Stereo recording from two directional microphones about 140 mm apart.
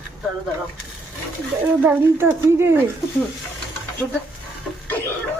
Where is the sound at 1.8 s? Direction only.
15° right (ahead or behind).